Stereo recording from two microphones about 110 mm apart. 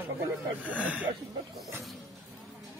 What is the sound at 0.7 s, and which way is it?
Speech, 15° right (ahead or behind).